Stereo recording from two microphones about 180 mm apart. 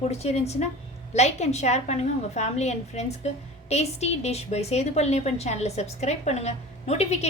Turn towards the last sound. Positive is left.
turn(degrees=35)  # may be behind; listen again after turning